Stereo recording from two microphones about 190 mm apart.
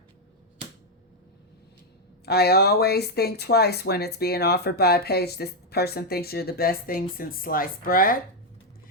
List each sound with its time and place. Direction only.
2.2 s speech: 55° left (ahead or behind)